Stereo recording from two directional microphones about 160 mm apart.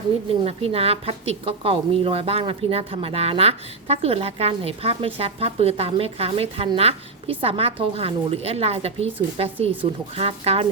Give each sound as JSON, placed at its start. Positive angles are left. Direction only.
{"t": 0.4, "sound": "a woman's voice", "side_deg": -40}